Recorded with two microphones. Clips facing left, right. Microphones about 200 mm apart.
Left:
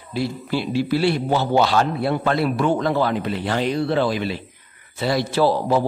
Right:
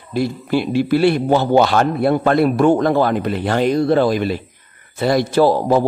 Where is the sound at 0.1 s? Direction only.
50° right (ahead or behind).